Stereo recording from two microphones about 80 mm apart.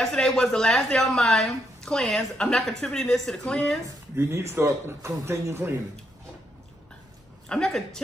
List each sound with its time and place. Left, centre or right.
0.0 s speech: centre
3.8 s speech: right
7.4 s speech: centre